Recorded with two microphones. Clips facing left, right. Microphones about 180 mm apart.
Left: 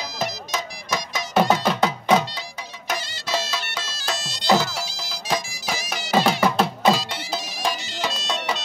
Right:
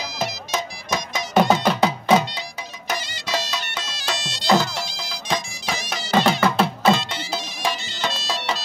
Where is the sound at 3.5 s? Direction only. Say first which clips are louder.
Right 1 dB; 5° left (ahead or behind).